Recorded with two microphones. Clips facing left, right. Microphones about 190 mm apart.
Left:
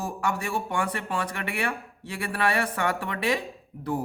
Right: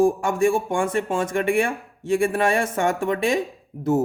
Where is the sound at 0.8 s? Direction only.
25° right (ahead or behind).